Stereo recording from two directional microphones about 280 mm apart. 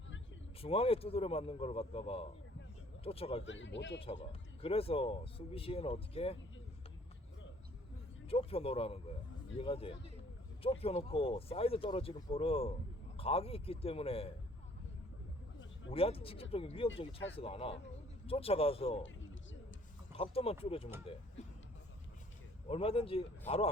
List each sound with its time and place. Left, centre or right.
0.6 s speech: centre
3.4 s speech: left
4.3 s speech: left
8.3 s speech: left
15.9 s speech: centre
20.1 s speech: centre
22.7 s speech: centre